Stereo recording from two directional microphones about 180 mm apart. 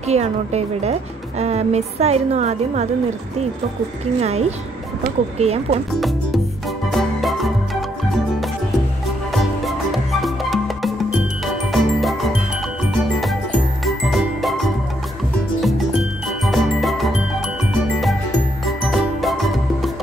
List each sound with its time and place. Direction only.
0.1 s a woman's voice: 35° right (ahead or behind)
4.2 s a woman's voice: 35° right (ahead or behind)
5.9 s speech: centre (ahead or behind)
6.9 s music: centre (ahead or behind)
9.3 s music: centre (ahead or behind)
13.8 s jingle: centre (ahead or behind)
16.4 s music: centre (ahead or behind)
18.9 s music: centre (ahead or behind)